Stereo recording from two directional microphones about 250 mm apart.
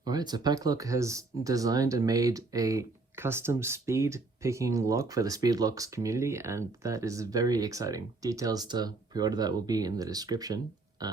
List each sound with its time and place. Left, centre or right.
0.0 s speech: centre
11.0 s burping: centre